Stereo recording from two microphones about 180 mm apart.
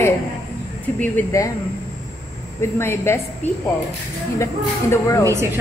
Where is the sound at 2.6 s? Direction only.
15° left (ahead or behind).